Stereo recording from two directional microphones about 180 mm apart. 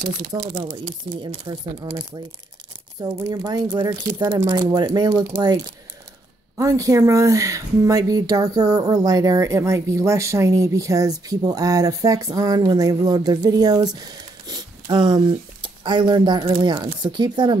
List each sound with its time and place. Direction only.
0.6 s speech: 25° right (ahead or behind)
6.6 s speech: 20° right (ahead or behind)